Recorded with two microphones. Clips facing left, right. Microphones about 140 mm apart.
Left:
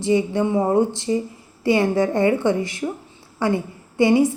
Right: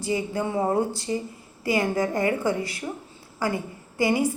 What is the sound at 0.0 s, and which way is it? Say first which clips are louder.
A woman's voice: left 7 dB; 25° left (ahead or behind).